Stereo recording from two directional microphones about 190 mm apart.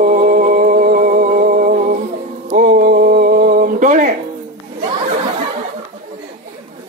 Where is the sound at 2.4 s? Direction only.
45° right (ahead or behind).